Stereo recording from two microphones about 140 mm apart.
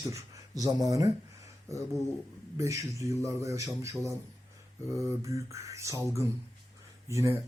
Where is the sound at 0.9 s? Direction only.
25° right (ahead or behind).